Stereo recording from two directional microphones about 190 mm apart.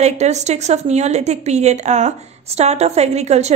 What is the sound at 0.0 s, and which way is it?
A woman's voice, 35° right (ahead or behind).